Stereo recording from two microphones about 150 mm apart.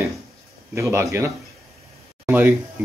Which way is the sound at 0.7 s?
20° right (ahead or behind).